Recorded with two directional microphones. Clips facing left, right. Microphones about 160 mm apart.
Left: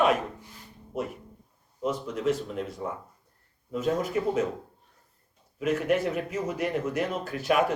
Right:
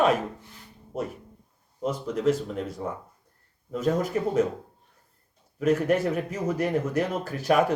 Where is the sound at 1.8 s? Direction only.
40° right (ahead or behind).